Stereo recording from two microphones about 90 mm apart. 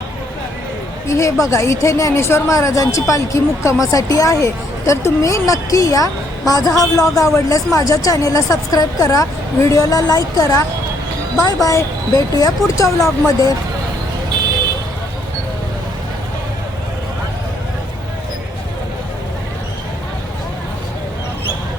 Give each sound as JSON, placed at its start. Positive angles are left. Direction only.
{"t": 1.0, "sound": "speech", "side_deg": 35}